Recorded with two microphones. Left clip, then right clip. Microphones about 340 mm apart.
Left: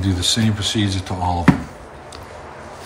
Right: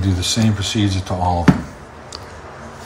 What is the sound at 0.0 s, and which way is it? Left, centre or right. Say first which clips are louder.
Speech: left 1 dB; centre.